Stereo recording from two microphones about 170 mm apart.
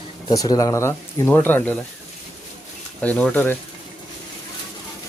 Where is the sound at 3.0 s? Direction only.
10° left (ahead or behind).